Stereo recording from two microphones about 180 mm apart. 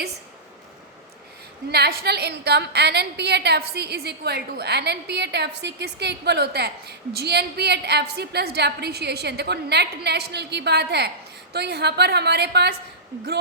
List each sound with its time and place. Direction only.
1.7 s a woman's voice: 65° right (ahead or behind)